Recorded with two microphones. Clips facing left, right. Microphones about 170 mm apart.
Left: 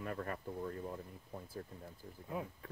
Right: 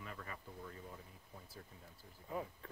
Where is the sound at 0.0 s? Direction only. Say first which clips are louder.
Left 9 dB; 50° left (ahead or behind).